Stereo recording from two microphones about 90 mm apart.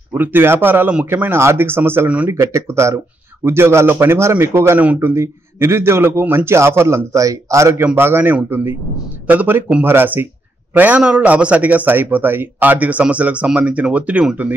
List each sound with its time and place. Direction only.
0.1 s a man's voice: 25° right (ahead or behind)
2.3 s a man's voice: 30° right (ahead or behind)
4.7 s speech: 15° right (ahead or behind)
5.0 s a man's voice: 30° right (ahead or behind); by 14.5 s 15° right (ahead or behind)